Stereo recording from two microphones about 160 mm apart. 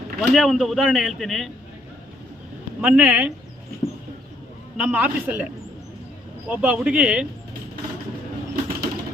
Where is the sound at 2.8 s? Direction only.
10° right (ahead or behind).